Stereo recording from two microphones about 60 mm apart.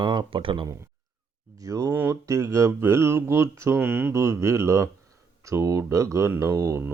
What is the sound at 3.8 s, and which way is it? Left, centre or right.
Speech, right.